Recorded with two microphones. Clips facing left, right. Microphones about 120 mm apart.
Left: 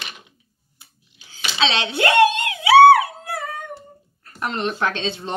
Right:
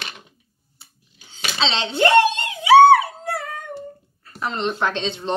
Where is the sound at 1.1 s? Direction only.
45° right (ahead or behind).